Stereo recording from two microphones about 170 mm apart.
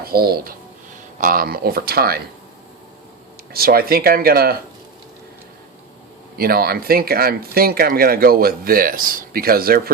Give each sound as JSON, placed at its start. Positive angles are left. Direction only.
{"t": 0.0, "sound": "speech", "side_deg": -65}
{"t": 3.5, "sound": "speech", "side_deg": -60}
{"t": 6.3, "sound": "speech", "side_deg": -65}